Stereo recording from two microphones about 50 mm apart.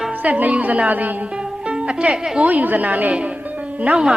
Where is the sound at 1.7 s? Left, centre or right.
Centre.